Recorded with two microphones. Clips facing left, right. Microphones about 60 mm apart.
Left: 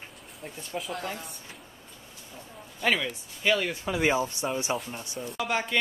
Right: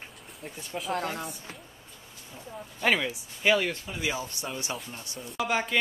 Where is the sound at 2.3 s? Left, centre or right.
Centre.